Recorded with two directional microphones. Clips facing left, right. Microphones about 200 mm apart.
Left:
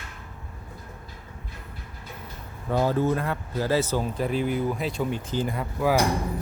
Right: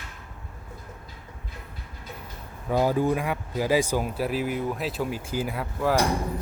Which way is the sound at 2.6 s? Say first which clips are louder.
Even; 10° right (ahead or behind).